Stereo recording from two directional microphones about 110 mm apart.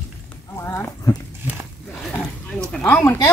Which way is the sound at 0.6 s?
20° left (ahead or behind).